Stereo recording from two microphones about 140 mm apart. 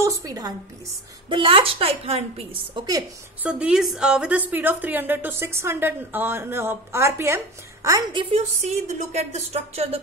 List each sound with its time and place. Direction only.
0.0 s a woman's voice: 25° right (ahead or behind)
1.3 s speech: 40° right (ahead or behind)
3.4 s a woman's voice: 5° right (ahead or behind)
8.1 s a woman's voice: 35° right (ahead or behind)
8.4 s speech: 55° right (ahead or behind)